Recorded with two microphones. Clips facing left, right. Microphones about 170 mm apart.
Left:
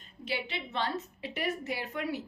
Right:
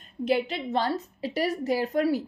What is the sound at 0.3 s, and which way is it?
A woman's voice, 45° right (ahead or behind).